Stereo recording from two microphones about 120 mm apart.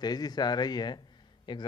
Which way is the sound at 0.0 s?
35° left (ahead or behind).